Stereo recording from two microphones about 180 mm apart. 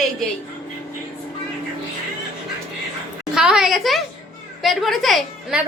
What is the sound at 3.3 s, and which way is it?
A woman's voice, 5° right (ahead or behind).